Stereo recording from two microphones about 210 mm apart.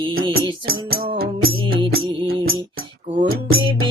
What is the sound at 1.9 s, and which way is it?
Music, 45° right (ahead or behind).